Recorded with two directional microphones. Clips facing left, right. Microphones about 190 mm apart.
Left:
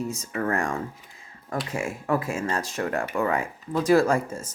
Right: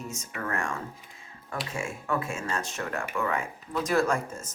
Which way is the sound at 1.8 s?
35° left (ahead or behind).